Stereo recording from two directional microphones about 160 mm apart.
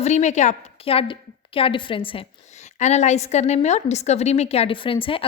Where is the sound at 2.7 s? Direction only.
45° left (ahead or behind).